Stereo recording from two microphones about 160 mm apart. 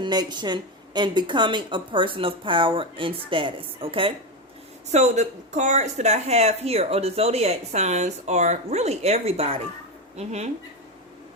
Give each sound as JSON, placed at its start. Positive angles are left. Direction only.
{"t": 0.0, "sound": "a woman's voice", "side_deg": -25}
{"t": 4.9, "sound": "speech", "side_deg": -45}